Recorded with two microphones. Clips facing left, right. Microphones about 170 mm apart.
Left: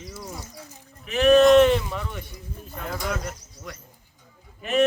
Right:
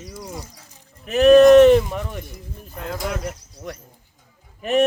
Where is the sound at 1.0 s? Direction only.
40° right (ahead or behind).